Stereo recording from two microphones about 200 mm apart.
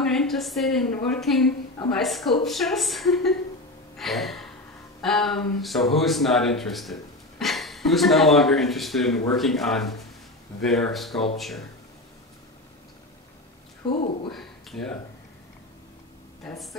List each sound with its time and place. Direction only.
0.1 s speech: centre (ahead or behind)
13.8 s speech: 25° left (ahead or behind)
14.3 s speech: centre (ahead or behind)
16.4 s speech: centre (ahead or behind)